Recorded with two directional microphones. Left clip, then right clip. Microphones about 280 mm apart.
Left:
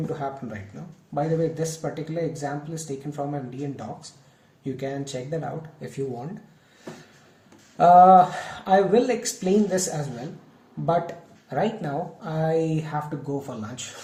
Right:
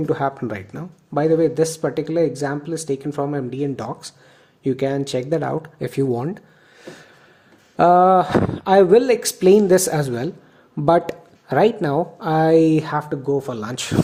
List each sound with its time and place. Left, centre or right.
0.1 s speech: right
4.6 s speech: right
7.8 s speech: right